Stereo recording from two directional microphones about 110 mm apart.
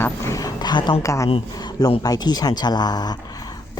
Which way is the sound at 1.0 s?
30° left (ahead or behind).